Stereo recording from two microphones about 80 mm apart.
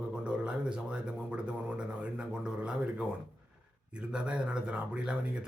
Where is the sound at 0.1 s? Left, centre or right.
Centre.